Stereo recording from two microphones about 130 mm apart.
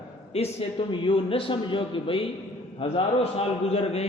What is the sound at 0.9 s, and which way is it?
A man's voice, 40° left (ahead or behind).